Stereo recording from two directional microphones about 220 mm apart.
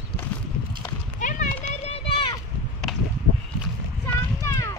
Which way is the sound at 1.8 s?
25° left (ahead or behind).